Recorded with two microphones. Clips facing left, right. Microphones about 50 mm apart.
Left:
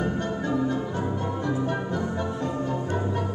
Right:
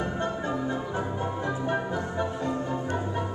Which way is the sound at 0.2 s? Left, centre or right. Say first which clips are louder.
Left 3 dB; centre.